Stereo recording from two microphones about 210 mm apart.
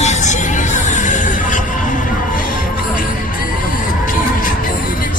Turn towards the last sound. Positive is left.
turn(degrees=40)  # may be behind; listen again after turning